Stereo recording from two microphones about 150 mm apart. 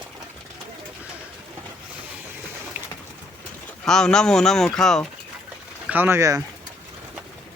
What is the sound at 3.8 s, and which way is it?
Speech, 5° left (ahead or behind).